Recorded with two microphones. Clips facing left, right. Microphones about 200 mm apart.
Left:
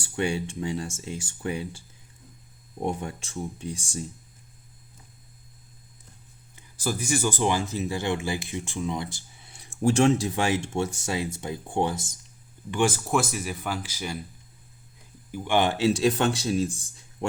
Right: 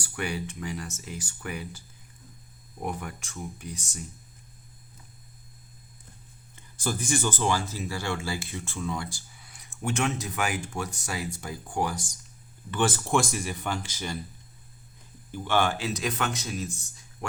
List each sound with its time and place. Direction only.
0.0 s speech: 25° left (ahead or behind)
2.8 s speech: 25° left (ahead or behind)
6.6 s speech: 10° left (ahead or behind); by 12.1 s 25° left (ahead or behind)
12.7 s speech: 10° left (ahead or behind)
15.3 s speech: 15° left (ahead or behind); by 16.7 s 30° left (ahead or behind)